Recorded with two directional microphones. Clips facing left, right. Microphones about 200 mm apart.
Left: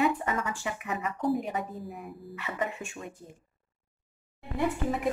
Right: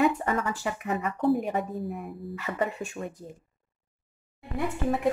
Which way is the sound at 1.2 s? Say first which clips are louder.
Right 4 dB; 50° right (ahead or behind).